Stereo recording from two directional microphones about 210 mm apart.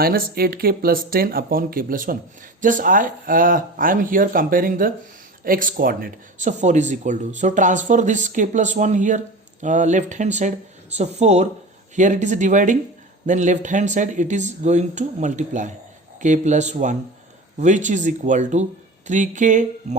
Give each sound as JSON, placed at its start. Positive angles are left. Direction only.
{"t": 0.0, "sound": "speech", "side_deg": -45}